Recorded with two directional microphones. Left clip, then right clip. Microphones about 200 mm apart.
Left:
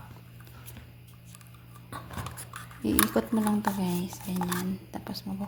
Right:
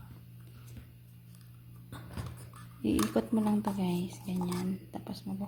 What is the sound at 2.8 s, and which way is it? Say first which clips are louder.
Speech: left 4 dB; centre (ahead or behind).